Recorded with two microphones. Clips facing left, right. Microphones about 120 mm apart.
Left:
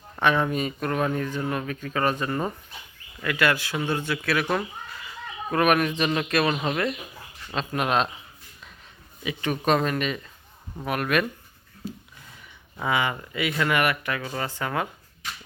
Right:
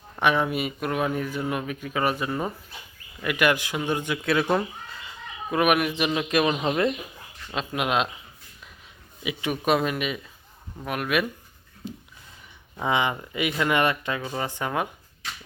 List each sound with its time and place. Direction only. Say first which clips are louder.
0.2 s speech: even; 10° right (ahead or behind)
5.5 s speech: even; 10° right (ahead or behind)
7.5 s speech: left 1 dB; 5° right (ahead or behind)
9.2 s speech: left 1 dB; 10° right (ahead or behind)
11.8 s speech: left 1 dB; 20° right (ahead or behind)